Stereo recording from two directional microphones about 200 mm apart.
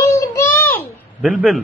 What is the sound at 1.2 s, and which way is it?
Speech, 5° right (ahead or behind).